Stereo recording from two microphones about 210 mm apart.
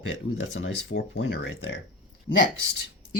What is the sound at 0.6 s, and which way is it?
Speech, 65° left (ahead or behind).